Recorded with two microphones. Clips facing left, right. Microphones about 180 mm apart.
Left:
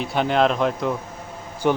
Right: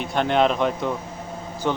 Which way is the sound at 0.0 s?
5° left (ahead or behind).